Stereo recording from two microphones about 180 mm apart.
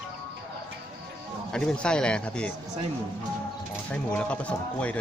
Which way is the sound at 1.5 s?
5° left (ahead or behind).